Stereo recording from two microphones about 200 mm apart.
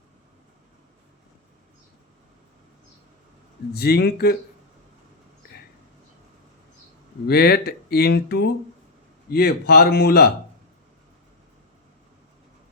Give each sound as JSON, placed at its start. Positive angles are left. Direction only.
{"t": 3.7, "sound": "speech", "side_deg": 50}
{"t": 7.3, "sound": "speech", "side_deg": 50}